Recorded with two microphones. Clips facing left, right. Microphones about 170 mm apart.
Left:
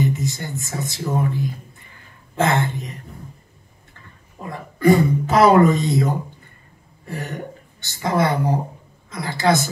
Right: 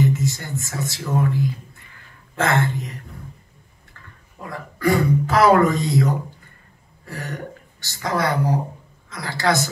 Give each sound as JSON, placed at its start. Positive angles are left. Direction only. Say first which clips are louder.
{"t": 0.0, "sound": "speech", "louder": "right 1 dB", "side_deg": 20}
{"t": 4.4, "sound": "speech", "louder": "left 4 dB", "side_deg": 20}